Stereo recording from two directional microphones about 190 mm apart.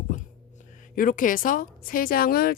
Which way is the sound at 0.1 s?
40° left (ahead or behind).